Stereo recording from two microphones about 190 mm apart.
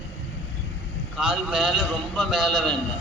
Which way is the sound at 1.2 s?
Centre (ahead or behind).